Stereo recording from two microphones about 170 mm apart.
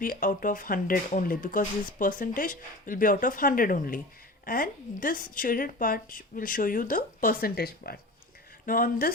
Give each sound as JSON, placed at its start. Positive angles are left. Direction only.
{"t": 0.0, "sound": "a woman's voice", "side_deg": 55}